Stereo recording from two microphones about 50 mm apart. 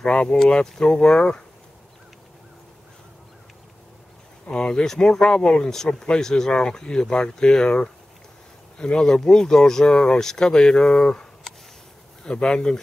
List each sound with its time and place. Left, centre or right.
0.1 s speech: centre
4.5 s speech: centre
12.3 s speech: centre